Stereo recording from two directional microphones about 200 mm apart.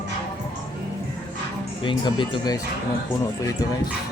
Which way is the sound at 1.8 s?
25° left (ahead or behind).